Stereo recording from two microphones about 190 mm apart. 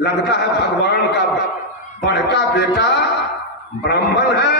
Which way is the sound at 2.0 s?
65° left (ahead or behind).